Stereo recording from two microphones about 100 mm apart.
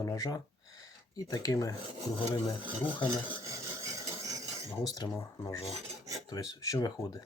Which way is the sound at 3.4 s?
30° right (ahead or behind).